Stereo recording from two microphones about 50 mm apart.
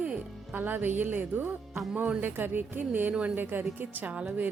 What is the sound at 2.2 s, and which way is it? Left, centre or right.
Speech, right.